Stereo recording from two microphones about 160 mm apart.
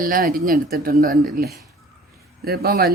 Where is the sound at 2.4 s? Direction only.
75° right (ahead or behind).